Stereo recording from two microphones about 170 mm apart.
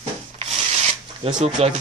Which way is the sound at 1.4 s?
45° right (ahead or behind).